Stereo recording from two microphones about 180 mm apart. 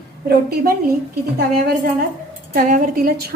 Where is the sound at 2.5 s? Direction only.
50° right (ahead or behind).